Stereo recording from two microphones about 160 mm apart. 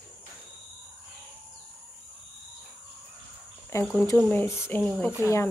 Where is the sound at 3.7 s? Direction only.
15° left (ahead or behind).